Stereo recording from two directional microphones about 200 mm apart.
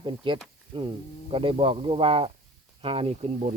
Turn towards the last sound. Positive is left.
turn(degrees=-35)  # may be behind; listen again after turning